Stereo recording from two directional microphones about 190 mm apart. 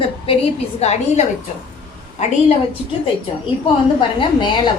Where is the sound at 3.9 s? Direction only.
25° left (ahead or behind).